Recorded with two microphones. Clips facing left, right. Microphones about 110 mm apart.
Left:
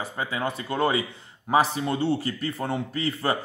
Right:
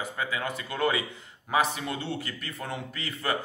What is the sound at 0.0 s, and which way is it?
A man's voice, 30° left (ahead or behind).